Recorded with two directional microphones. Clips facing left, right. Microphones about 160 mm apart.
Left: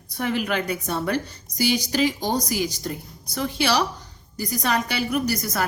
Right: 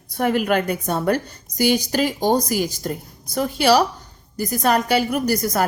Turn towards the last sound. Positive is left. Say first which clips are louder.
# right 4 dB
turn(degrees=-50)  # may be behind; listen again after turning